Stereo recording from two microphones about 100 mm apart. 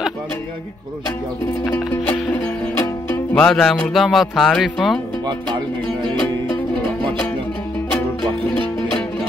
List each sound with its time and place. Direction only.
2.0 s music: 20° left (ahead or behind)
3.3 s speech: 10° left (ahead or behind)